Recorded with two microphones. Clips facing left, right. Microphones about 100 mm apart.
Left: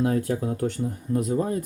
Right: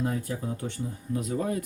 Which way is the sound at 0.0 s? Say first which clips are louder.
Left 7 dB; 75° left (ahead or behind).